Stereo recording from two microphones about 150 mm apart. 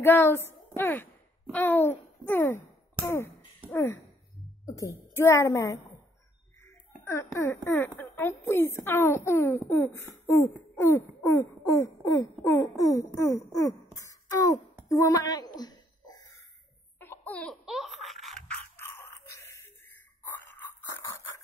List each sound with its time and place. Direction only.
0.0 s speech: 15° left (ahead or behind)
4.7 s throat clearing: 20° left (ahead or behind)
7.1 s speech: 20° left (ahead or behind)
9.8 s throat clearing: 15° left (ahead or behind)
13.6 s a sound: 20° left (ahead or behind)
15.0 s speech: 20° left (ahead or behind)
17.0 s laughter: 15° left (ahead or behind)
17.6 s toothbrush: centre (ahead or behind)
18.6 s a sound: 15° left (ahead or behind)